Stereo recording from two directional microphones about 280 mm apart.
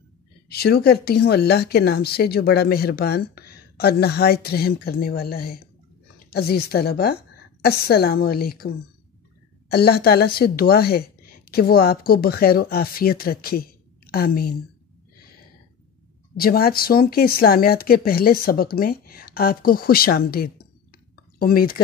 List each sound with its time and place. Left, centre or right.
0.5 s speech: left
16.3 s speech: left